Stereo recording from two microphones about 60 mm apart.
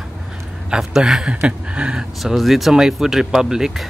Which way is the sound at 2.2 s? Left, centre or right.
Centre.